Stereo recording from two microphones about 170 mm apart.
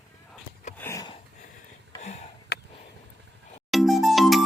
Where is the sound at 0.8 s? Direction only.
15° left (ahead or behind).